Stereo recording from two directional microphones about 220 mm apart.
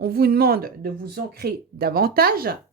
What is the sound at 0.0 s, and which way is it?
Speech, 45° right (ahead or behind).